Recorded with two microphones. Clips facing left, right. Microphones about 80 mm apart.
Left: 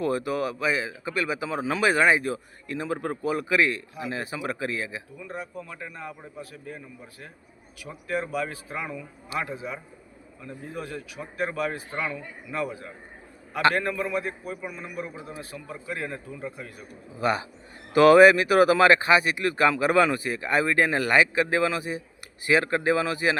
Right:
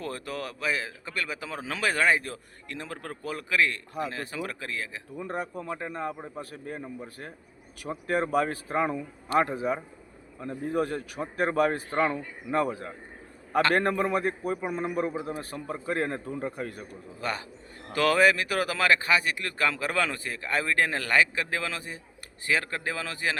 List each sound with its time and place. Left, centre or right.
0.0 s speech: centre
5.1 s a man's voice: right
17.2 s speech: centre